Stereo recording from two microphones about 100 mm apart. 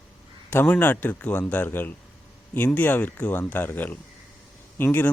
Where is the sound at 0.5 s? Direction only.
20° left (ahead or behind).